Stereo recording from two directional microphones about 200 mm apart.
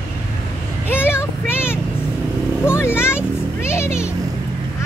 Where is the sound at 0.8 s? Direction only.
10° left (ahead or behind).